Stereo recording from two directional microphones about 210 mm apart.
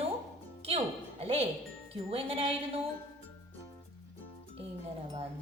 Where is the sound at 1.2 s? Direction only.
30° right (ahead or behind).